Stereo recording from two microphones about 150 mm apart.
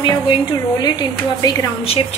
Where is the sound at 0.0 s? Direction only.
30° left (ahead or behind).